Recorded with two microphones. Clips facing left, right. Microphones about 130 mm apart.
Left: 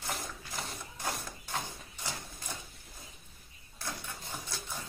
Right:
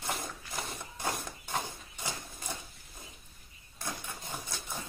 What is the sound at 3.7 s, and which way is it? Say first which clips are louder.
Printer: right 1 dB; 15° right (ahead or behind).